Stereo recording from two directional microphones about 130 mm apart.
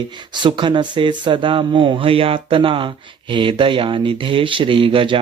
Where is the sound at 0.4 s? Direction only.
40° right (ahead or behind).